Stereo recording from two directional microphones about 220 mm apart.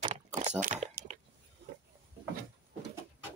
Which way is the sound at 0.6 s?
35° right (ahead or behind).